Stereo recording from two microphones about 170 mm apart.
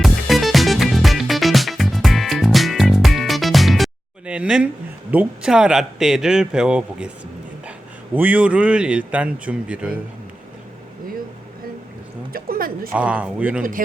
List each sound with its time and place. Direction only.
0.0 s music: centre (ahead or behind)
4.3 s a sound: 5° right (ahead or behind)
5.1 s speech: 5° right (ahead or behind)
8.1 s speech: 10° right (ahead or behind)
12.3 s a sound: 60° right (ahead or behind)
12.9 s speech: 5° right (ahead or behind)
13.6 s speech: 55° right (ahead or behind)